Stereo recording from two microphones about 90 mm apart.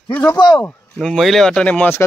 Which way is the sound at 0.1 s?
20° left (ahead or behind).